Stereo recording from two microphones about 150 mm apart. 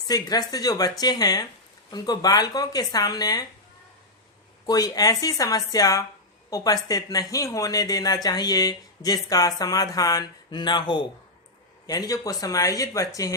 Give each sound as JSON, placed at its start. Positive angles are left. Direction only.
{"t": 0.1, "sound": "speech", "side_deg": 25}
{"t": 4.6, "sound": "speech", "side_deg": 25}